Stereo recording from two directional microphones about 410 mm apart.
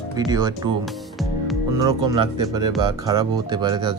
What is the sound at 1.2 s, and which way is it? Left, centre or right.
Music, centre.